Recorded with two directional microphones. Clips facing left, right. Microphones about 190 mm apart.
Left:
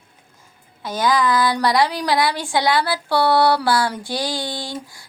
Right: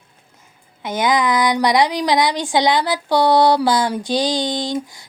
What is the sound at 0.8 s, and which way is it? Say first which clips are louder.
A woman's voice: right 1 dB; 20° right (ahead or behind).